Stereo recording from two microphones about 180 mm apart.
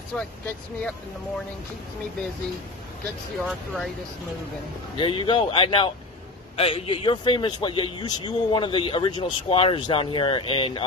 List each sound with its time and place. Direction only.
0.1 s speech: 5° left (ahead or behind)
3.4 s speech: centre (ahead or behind)
4.9 s speech: 30° left (ahead or behind)